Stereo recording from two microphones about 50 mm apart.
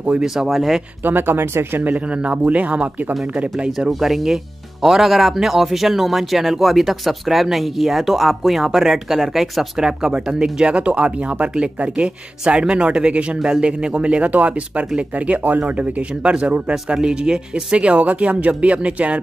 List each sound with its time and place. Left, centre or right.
0.5 s speech: centre
1.0 s speech: right
2.0 s speech: right
4.0 s speech: centre; by 19.2 s right